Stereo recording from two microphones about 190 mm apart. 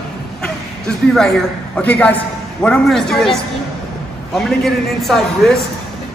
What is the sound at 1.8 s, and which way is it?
A woman's voice, 5° left (ahead or behind).